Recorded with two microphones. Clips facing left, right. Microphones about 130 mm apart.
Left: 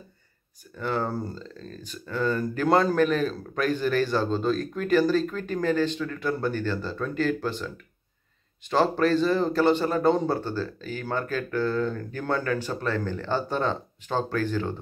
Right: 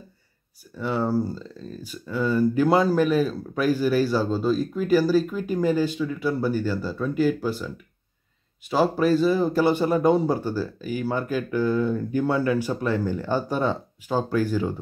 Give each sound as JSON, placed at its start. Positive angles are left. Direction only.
{"t": 0.7, "sound": "speech", "side_deg": -5}